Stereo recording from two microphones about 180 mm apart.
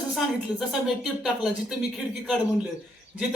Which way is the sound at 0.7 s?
Centre (ahead or behind).